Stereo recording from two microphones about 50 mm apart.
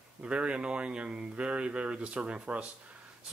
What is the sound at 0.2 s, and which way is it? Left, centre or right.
Speech, right.